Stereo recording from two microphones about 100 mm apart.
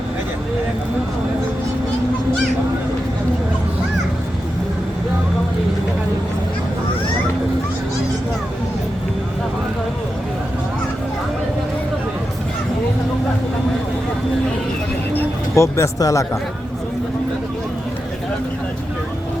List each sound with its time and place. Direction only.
15.1 s speech: 30° left (ahead or behind)